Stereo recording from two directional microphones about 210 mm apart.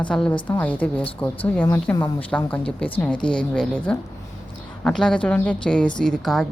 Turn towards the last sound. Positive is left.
turn(degrees=0)  # may be behind; listen again after turning